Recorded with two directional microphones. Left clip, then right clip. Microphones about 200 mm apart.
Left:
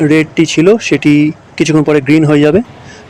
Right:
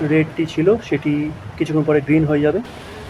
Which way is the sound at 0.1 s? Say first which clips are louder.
Left 8 dB; 55° left (ahead or behind).